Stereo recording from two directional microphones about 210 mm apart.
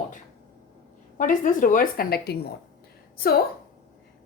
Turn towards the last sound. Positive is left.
turn(degrees=45)  # may be behind; listen again after turning